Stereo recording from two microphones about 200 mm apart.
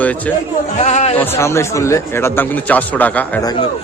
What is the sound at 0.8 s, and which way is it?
Speech, 35° left (ahead or behind).